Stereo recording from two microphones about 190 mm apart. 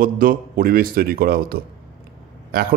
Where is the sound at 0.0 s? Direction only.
50° right (ahead or behind).